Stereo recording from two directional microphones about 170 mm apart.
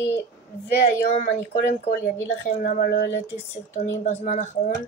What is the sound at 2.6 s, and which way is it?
Speech, 55° left (ahead or behind).